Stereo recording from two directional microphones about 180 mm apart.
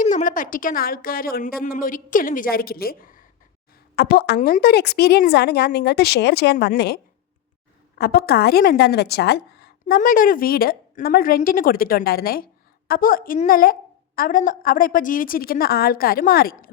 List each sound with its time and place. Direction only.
0.0 s a woman's voice: 45° left (ahead or behind)